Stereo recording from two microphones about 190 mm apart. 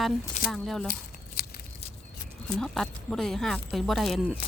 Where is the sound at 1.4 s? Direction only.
55° left (ahead or behind).